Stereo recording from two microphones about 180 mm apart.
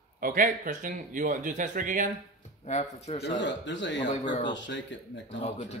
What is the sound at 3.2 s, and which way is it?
Speech, 90° left.